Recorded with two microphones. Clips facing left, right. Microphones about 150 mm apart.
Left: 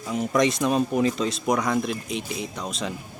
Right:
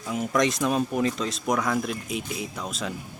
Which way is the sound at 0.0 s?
Centre (ahead or behind).